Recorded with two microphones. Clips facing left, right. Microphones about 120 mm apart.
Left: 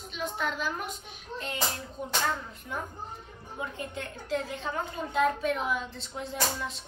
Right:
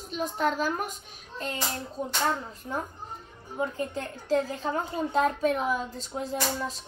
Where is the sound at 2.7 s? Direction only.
40° right (ahead or behind).